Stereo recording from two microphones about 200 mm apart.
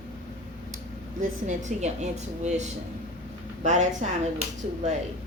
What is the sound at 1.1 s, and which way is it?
A woman's voice, 40° right (ahead or behind).